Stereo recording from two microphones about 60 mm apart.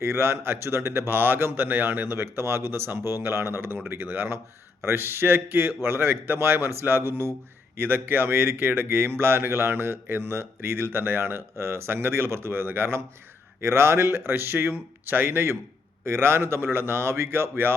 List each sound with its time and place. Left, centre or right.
0.0 s a man's voice: right